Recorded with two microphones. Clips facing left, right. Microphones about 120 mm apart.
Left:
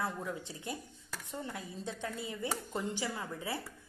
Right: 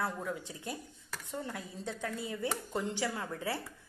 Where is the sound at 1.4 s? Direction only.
20° left (ahead or behind).